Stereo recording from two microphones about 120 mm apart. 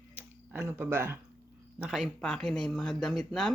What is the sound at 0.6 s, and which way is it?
Speech, 20° right (ahead or behind).